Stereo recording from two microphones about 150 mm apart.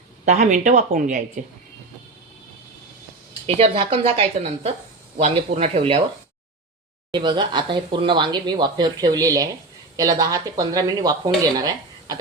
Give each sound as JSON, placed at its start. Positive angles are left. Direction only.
{"t": 0.3, "sound": "speech", "side_deg": -55}
{"t": 3.4, "sound": "speech", "side_deg": -35}
{"t": 7.1, "sound": "speech", "side_deg": -30}